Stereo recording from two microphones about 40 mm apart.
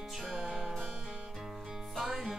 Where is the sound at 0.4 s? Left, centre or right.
Centre.